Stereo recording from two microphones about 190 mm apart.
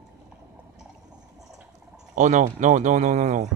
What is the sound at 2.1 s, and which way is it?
Speech, 40° right (ahead or behind).